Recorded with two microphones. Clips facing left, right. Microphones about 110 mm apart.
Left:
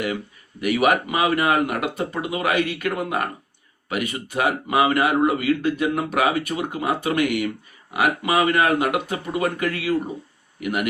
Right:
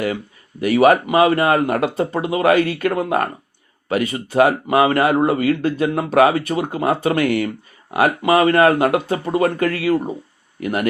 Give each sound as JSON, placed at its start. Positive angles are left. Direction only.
{"t": 0.6, "sound": "speech", "side_deg": -35}